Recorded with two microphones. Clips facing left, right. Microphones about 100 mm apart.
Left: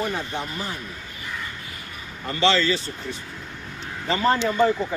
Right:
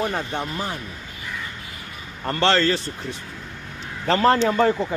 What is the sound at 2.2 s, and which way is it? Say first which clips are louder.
Speech: right 1 dB; 55° right (ahead or behind).